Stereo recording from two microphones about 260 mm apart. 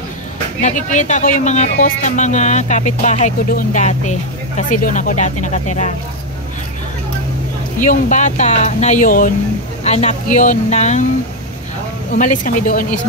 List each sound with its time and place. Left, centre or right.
0.6 s speech: left
7.8 s speech: left
12.1 s speech: left